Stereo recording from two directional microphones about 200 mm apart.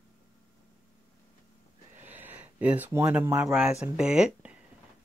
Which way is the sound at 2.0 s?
10° right (ahead or behind).